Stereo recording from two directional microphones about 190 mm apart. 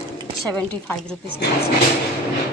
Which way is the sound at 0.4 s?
5° left (ahead or behind).